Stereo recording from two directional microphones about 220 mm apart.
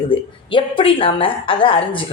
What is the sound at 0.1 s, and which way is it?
A woman's voice, 25° left (ahead or behind).